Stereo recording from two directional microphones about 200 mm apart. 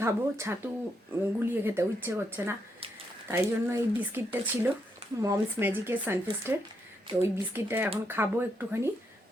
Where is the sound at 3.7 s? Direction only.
10° right (ahead or behind).